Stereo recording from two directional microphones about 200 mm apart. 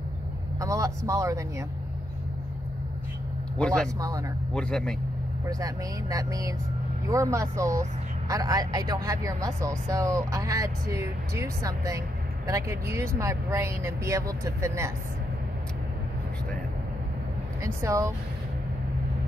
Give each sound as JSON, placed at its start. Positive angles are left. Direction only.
{"t": 0.6, "sound": "speech", "side_deg": -15}
{"t": 3.5, "sound": "speech", "side_deg": 5}
{"t": 4.0, "sound": "speech", "side_deg": -15}
{"t": 4.6, "sound": "speech", "side_deg": 5}
{"t": 5.4, "sound": "speech", "side_deg": -15}
{"t": 17.6, "sound": "speech", "side_deg": -15}